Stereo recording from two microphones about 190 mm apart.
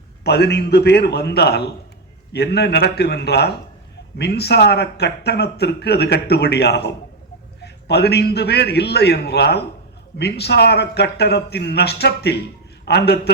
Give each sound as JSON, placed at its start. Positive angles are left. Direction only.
{"t": 0.3, "sound": "speech", "side_deg": 60}